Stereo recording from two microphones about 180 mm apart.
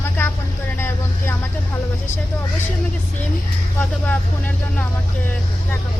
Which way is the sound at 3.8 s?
10° left (ahead or behind).